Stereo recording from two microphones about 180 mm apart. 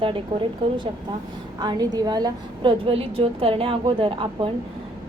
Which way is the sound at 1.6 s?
20° right (ahead or behind).